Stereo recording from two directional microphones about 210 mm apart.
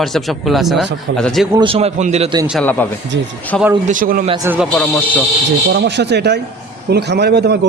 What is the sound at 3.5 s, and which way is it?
Speech, 5° left (ahead or behind).